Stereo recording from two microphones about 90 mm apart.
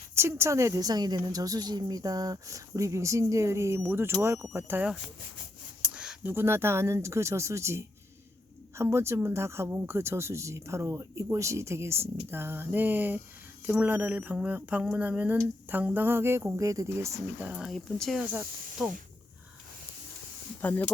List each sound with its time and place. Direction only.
0.1 s a woman's voice: 30° right (ahead or behind)
5.8 s a sound: 10° right (ahead or behind)
6.2 s a woman's voice: 25° right (ahead or behind)
16.6 s a woman's voice: 35° right (ahead or behind)
17.4 s speech: 15° right (ahead or behind)
17.7 s speech: 5° left (ahead or behind)
18.2 s speech: 20° right (ahead or behind)
20.6 s speech: 20° left (ahead or behind)